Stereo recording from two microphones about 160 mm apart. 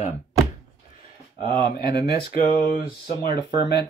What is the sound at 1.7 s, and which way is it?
Speech, 75° left (ahead or behind).